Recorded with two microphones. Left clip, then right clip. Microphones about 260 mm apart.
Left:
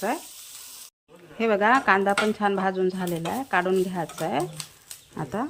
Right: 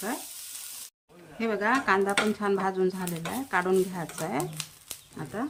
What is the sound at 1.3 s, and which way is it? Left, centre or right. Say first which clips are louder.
A woman's voice: left 6 dB; centre.